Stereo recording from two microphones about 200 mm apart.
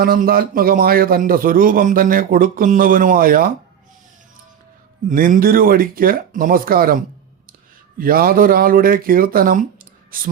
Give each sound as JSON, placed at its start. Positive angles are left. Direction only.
{"t": 0.0, "sound": "a man's voice", "side_deg": -45}
{"t": 5.0, "sound": "a man's voice", "side_deg": -40}